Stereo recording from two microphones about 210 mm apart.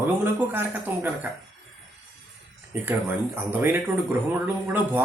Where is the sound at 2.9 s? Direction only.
10° right (ahead or behind).